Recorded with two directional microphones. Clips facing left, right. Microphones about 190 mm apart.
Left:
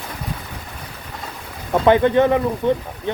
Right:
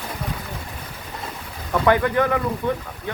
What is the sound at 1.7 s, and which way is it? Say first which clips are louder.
Speech: left 4 dB; 25° left (ahead or behind).